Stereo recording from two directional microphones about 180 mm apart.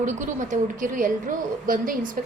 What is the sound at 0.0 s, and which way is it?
A woman's voice, 45° right (ahead or behind).